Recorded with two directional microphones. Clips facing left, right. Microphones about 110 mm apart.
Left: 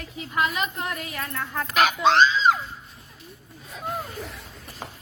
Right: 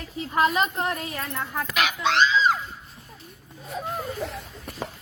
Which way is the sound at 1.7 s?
40° left (ahead or behind).